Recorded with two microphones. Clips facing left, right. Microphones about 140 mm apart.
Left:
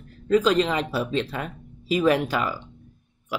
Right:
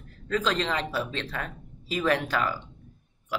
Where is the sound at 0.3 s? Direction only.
10° left (ahead or behind).